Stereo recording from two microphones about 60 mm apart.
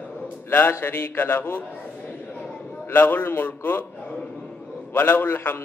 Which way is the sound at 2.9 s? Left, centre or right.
Left.